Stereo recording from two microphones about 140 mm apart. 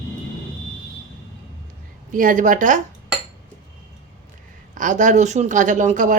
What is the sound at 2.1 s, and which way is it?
Speech, 75° right (ahead or behind).